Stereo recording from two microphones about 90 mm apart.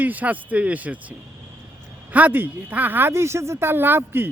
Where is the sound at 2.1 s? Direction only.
20° right (ahead or behind).